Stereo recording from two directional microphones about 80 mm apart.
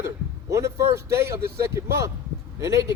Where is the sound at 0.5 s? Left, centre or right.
Right.